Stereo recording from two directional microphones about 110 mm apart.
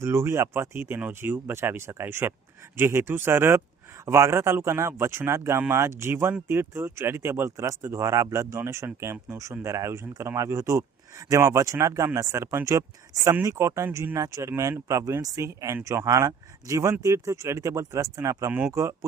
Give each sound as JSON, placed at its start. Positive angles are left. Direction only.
{"t": 0.0, "sound": "speech", "side_deg": -25}